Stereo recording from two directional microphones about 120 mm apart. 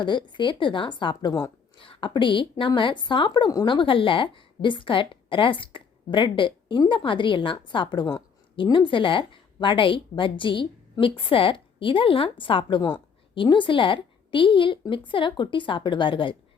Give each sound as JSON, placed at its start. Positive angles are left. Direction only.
{"t": 0.0, "sound": "a woman's voice", "side_deg": 40}
{"t": 1.8, "sound": "a woman's voice", "side_deg": 45}